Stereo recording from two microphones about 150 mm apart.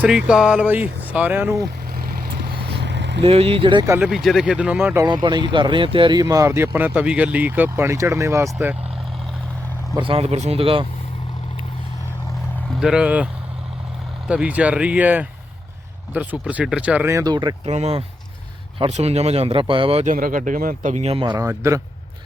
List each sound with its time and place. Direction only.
0.0 s speech: 5° right (ahead or behind)
2.2 s vehicle: 90° right
3.2 s speech: 40° right (ahead or behind)
3.8 s speech: 15° right (ahead or behind)
4.1 s speech: centre (ahead or behind)
5.0 s speech: 30° right (ahead or behind)
10.0 s speech: 40° right (ahead or behind)
12.8 s speech: 5° right (ahead or behind)
14.3 s speech: 10° right (ahead or behind); by 17.5 s 30° right (ahead or behind)
17.7 s speech: 45° right (ahead or behind)
20.1 s speech: 65° right (ahead or behind); by 21.2 s 45° right (ahead or behind)
21.2 s speech: 20° right (ahead or behind)